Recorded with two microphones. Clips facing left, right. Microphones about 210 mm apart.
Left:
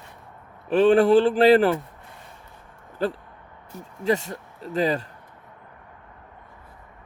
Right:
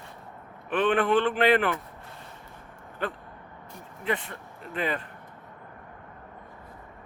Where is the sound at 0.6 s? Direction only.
30° left (ahead or behind).